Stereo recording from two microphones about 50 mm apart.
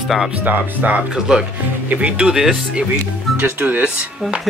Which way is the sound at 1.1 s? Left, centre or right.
Centre.